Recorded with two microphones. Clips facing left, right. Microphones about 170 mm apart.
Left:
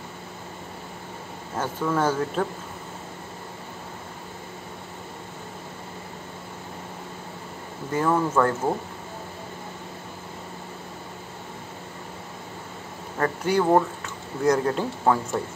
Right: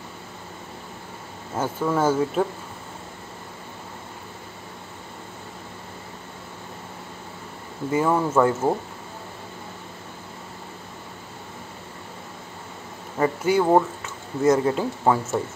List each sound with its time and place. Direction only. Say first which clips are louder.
1.6 s speech: right 2 dB; 10° right (ahead or behind)
7.9 s speech: right 2 dB; 10° right (ahead or behind)
13.2 s speech: right 2 dB; 5° right (ahead or behind)